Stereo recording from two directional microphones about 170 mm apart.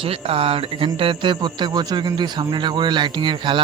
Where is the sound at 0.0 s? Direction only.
35° right (ahead or behind).